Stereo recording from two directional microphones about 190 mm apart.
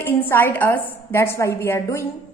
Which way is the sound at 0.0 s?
10° left (ahead or behind).